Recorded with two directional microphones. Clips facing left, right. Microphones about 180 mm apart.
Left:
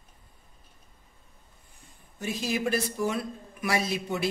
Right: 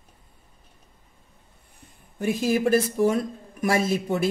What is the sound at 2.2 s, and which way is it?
Speech, 50° right (ahead or behind).